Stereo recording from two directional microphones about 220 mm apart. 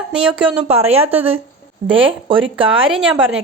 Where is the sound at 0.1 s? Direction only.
5° right (ahead or behind).